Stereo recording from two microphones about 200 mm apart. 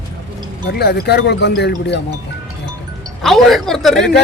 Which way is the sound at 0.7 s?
55° left (ahead or behind).